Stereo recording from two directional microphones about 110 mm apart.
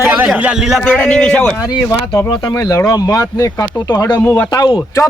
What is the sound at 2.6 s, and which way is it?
Speech, 35° left (ahead or behind).